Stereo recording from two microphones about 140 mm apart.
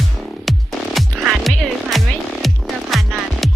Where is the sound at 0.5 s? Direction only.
Centre (ahead or behind).